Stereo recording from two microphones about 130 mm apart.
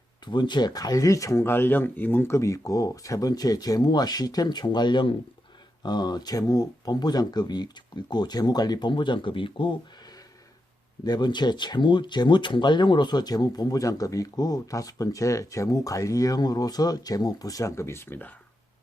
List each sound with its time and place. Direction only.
0.3 s speech: 35° left (ahead or behind)
11.0 s speech: 35° left (ahead or behind); by 18.3 s 15° left (ahead or behind)